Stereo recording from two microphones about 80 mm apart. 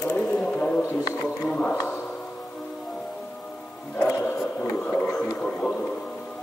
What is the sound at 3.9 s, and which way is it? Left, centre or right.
Music, left.